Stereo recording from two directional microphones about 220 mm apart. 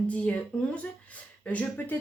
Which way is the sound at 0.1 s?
5° left (ahead or behind).